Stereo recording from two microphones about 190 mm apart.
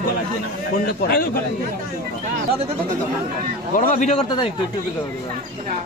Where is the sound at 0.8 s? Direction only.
55° left (ahead or behind).